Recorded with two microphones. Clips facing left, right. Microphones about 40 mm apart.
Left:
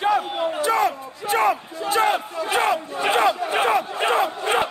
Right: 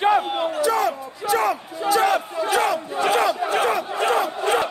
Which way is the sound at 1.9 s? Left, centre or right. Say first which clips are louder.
Right 1 dB; left.